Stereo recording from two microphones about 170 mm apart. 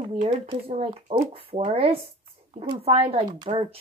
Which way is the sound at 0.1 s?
30° right (ahead or behind).